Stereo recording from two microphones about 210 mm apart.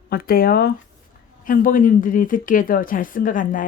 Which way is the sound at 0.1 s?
45° left (ahead or behind).